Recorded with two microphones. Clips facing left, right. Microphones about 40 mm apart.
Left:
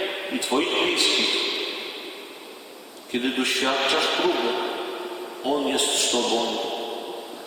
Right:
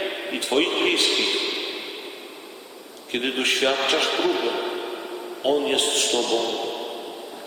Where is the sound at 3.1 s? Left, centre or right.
Right.